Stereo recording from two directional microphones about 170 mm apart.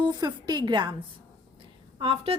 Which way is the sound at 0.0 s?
25° right (ahead or behind).